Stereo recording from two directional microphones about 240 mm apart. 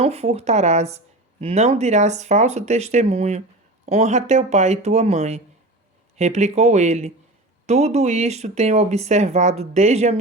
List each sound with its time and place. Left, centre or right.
0.0 s speech: right